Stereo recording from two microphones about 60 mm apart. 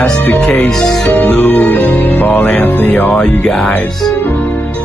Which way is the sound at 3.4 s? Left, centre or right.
Centre.